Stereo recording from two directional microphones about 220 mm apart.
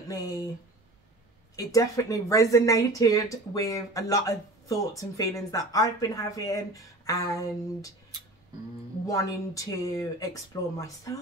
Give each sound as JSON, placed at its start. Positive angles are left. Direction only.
{"t": 1.6, "sound": "speech", "side_deg": 15}
{"t": 9.0, "sound": "speech", "side_deg": 15}